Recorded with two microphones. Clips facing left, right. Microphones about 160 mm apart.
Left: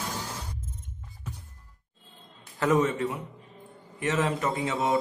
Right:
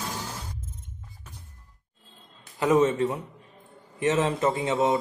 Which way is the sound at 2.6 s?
20° right (ahead or behind).